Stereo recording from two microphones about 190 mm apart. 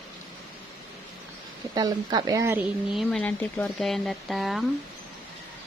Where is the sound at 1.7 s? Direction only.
20° right (ahead or behind).